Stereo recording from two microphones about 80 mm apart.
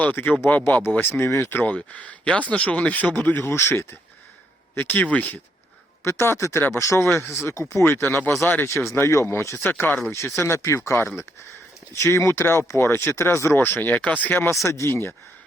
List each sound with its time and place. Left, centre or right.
0.0 s speech: left
3.4 s speech: left
6.1 s speech: left
8.9 s speech: left
14.6 s speech: left